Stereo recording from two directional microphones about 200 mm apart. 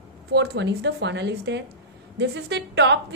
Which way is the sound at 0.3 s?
55° right (ahead or behind).